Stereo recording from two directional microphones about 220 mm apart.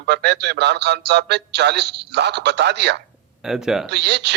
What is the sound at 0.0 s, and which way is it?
Speech, 50° right (ahead or behind).